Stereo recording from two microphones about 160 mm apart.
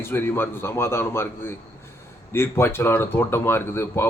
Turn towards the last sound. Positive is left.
turn(degrees=15)  # may be behind; listen again after turning